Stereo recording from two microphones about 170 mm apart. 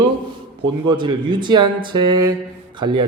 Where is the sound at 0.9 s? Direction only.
25° right (ahead or behind).